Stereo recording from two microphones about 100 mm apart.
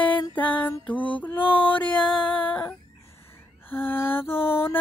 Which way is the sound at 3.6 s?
20° left (ahead or behind).